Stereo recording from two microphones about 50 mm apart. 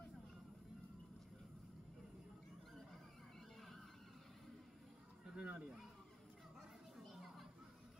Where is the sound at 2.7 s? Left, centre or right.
Centre.